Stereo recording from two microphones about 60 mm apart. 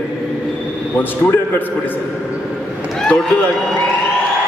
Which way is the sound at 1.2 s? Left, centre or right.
Left.